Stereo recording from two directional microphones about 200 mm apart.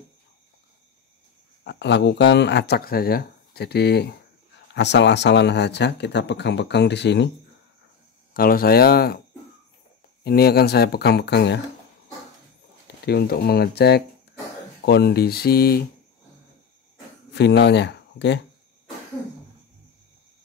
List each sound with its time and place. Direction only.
1.6 s speech: 60° left (ahead or behind)
8.3 s speech: 50° left (ahead or behind)
10.2 s speech: 50° left (ahead or behind)
13.0 s speech: 50° left (ahead or behind)
17.3 s speech: 60° left (ahead or behind)